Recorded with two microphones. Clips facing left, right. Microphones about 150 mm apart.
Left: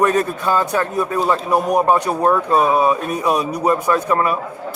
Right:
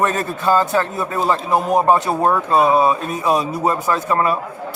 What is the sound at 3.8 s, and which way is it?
Speech, centre (ahead or behind).